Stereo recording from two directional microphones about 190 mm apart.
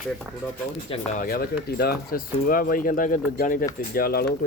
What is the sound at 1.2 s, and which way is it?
Speech, 50° left (ahead or behind).